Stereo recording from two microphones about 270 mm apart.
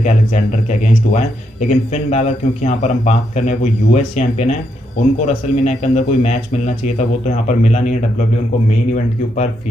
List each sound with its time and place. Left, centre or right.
0.0 s speech: left